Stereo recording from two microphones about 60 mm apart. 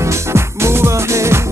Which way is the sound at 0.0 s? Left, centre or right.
Right.